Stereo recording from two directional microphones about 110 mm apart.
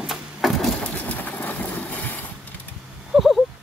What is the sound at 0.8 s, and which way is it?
Horse, 15° left (ahead or behind).